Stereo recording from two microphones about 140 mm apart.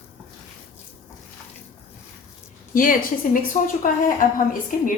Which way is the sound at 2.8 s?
75° left (ahead or behind).